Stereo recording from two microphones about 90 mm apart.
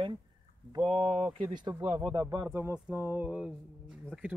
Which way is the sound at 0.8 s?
90° right.